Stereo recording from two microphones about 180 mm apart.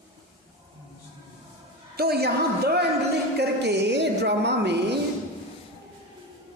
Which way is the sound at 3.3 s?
70° right (ahead or behind).